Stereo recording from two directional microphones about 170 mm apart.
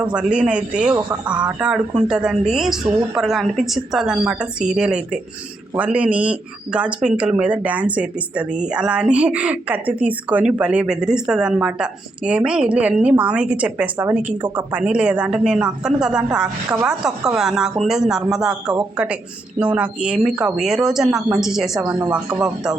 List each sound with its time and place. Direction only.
0.0 s speech: 5° right (ahead or behind)
19.5 s speech: 10° right (ahead or behind)
21.8 s speech: 20° right (ahead or behind)
22.4 s speech: 5° right (ahead or behind)